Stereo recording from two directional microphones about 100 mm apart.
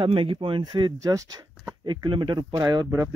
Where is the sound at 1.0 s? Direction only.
35° right (ahead or behind).